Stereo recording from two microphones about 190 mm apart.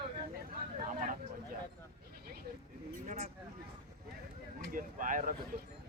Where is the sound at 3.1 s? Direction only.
35° right (ahead or behind).